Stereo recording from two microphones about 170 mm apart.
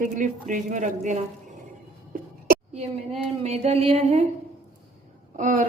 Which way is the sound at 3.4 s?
40° right (ahead or behind).